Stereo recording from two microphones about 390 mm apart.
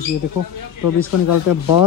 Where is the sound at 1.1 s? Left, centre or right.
Left.